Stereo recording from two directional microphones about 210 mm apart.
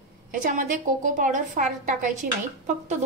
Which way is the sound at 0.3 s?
40° right (ahead or behind).